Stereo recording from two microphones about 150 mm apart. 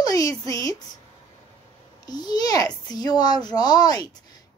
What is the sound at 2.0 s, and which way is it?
A child's voice, 25° left (ahead or behind).